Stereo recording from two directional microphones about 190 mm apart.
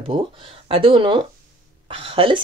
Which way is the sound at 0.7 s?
30° right (ahead or behind).